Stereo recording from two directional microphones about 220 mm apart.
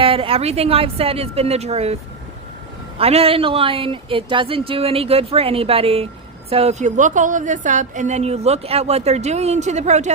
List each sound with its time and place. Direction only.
0.0 s speech: 25° right (ahead or behind)
3.0 s a woman's voice: 25° right (ahead or behind)